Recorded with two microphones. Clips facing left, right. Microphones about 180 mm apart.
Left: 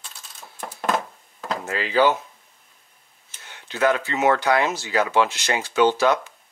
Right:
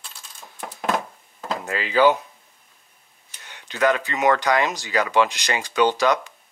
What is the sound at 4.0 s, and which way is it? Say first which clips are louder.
Speech: even; 15° right (ahead or behind).